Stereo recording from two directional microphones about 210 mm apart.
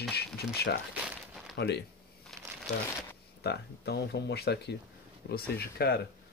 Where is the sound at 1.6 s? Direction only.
55° left (ahead or behind).